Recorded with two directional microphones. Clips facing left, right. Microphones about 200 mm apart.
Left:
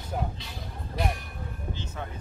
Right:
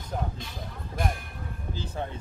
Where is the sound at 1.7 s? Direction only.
35° right (ahead or behind).